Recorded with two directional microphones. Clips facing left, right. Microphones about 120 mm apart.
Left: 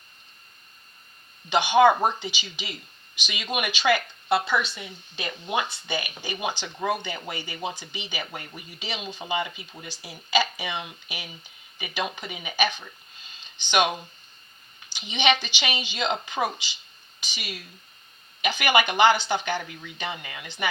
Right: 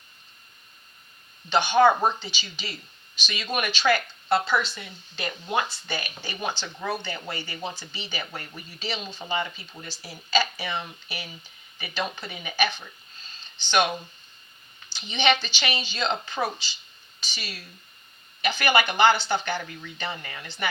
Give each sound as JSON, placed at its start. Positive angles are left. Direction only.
{"t": 1.5, "sound": "speech", "side_deg": 15}
{"t": 14.9, "sound": "speech", "side_deg": 15}